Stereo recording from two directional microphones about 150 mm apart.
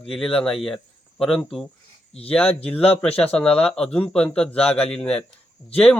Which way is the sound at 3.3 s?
10° left (ahead or behind).